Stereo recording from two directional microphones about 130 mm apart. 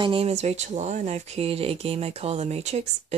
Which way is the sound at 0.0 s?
45° right (ahead or behind).